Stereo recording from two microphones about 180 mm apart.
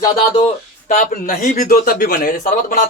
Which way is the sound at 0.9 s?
45° left (ahead or behind).